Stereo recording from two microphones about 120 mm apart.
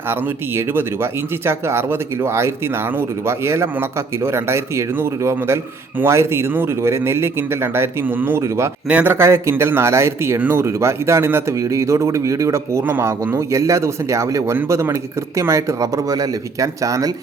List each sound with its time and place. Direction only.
0.1 s speech: 20° right (ahead or behind)